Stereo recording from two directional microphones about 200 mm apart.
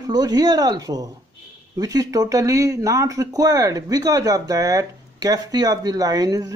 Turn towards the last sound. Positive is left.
turn(degrees=-20)  # may be behind; listen again after turning